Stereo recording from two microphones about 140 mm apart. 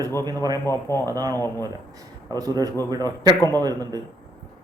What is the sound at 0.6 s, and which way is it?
Speech, 20° left (ahead or behind).